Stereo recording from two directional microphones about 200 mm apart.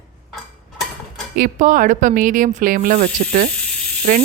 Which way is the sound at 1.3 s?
40° right (ahead or behind).